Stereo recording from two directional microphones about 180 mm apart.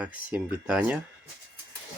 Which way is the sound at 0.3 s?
5° right (ahead or behind).